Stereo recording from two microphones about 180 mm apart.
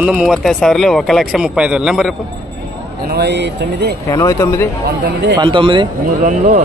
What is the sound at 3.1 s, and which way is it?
Speech, 70° right (ahead or behind).